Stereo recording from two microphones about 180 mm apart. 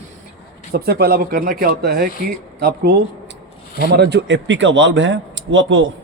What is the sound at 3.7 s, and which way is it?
A man's voice, 65° right (ahead or behind).